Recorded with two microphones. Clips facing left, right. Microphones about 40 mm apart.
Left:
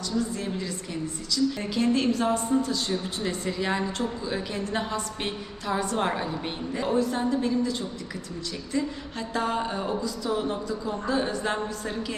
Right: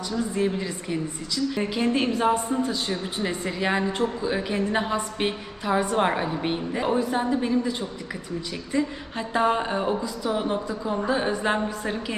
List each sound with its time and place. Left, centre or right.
0.1 s a woman's voice: centre